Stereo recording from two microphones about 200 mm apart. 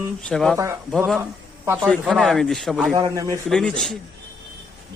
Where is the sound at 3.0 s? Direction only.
15° right (ahead or behind).